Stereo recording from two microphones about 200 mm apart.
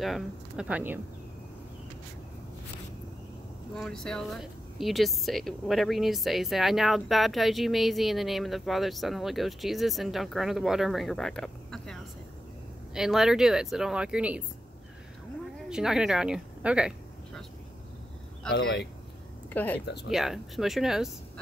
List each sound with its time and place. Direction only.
0.0 s speech: centre (ahead or behind)
3.7 s speech: centre (ahead or behind)
15.7 s a woman's voice: 5° right (ahead or behind)
18.6 s speech: 65° left (ahead or behind)
19.5 s speech: 10° left (ahead or behind)